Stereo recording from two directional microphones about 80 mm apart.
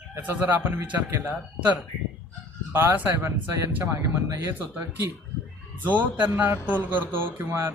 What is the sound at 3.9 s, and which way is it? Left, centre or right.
Speech, right.